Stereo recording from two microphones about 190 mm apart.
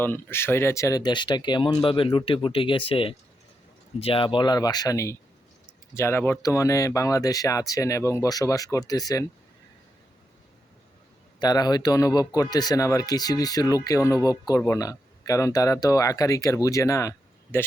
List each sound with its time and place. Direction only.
0.0 s speech: 10° left (ahead or behind)
11.3 s speech: 20° left (ahead or behind)